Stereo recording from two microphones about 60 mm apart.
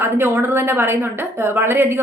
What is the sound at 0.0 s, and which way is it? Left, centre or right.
A woman's voice, right.